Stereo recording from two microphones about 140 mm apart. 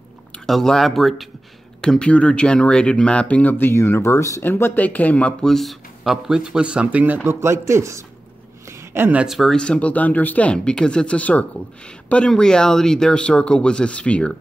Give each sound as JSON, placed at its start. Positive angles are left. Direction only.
{"t": 0.5, "sound": "a man's voice", "side_deg": 0}